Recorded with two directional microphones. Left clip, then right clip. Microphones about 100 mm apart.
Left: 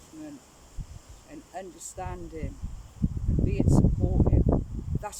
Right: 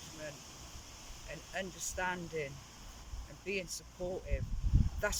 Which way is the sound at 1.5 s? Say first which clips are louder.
Left 1 dB; 40° left (ahead or behind).